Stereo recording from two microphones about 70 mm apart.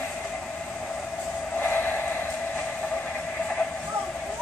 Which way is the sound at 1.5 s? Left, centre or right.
Left.